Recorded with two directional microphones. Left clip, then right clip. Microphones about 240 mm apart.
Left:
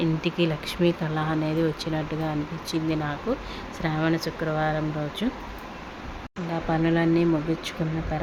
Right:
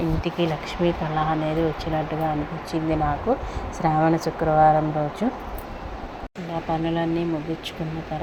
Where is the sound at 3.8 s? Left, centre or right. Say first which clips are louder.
Right 6 dB; centre.